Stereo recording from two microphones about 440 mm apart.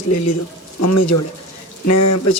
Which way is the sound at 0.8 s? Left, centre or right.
Left.